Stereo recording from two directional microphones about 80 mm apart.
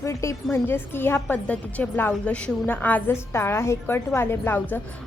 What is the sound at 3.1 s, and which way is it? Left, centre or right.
A woman's voice, left.